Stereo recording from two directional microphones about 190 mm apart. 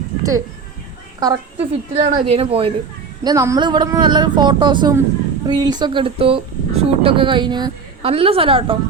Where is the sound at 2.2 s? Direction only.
30° right (ahead or behind).